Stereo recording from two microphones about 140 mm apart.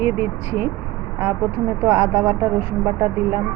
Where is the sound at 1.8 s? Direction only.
15° right (ahead or behind).